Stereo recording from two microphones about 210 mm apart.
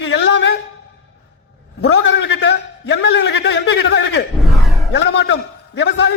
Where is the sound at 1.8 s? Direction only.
55° left (ahead or behind).